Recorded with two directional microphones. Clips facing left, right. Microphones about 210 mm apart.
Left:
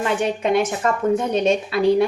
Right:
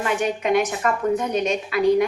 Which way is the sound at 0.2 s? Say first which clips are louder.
Left 1 dB; 30° left (ahead or behind).